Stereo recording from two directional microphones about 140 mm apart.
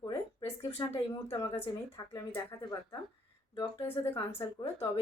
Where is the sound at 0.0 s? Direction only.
25° left (ahead or behind).